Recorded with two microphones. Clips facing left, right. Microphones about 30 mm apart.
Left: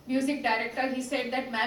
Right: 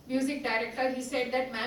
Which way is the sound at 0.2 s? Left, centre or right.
Centre.